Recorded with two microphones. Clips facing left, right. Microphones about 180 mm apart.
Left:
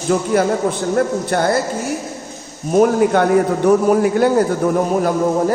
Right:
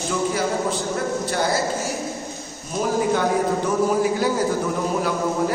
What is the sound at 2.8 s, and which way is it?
A man's voice, 60° left (ahead or behind).